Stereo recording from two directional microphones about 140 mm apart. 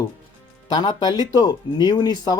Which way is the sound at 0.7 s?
30° left (ahead or behind).